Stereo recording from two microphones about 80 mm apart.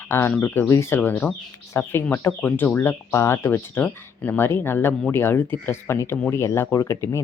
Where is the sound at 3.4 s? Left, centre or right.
Left.